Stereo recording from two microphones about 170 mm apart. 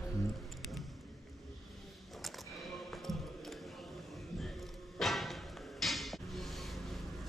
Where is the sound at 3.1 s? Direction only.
Centre (ahead or behind).